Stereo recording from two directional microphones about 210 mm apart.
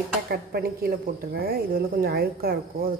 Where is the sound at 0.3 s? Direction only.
45° right (ahead or behind).